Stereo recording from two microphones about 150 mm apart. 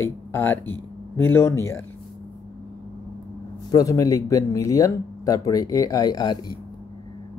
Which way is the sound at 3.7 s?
20° left (ahead or behind).